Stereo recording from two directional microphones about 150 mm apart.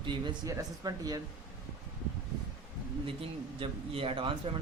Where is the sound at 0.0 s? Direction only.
30° right (ahead or behind).